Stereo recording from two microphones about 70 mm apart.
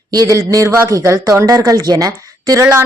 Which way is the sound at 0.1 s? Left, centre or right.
Right.